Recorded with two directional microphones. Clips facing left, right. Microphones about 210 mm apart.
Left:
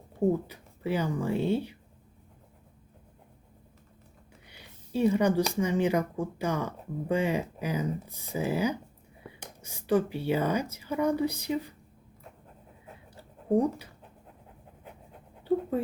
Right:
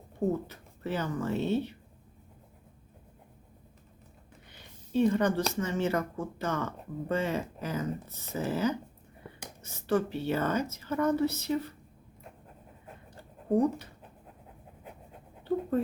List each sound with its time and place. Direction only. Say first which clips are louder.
0.3 s speech: left 4 dB; 10° left (ahead or behind)
4.4 s speech: left 1 dB; 10° left (ahead or behind)
13.1 s a sound: left 1 dB; 10° left (ahead or behind)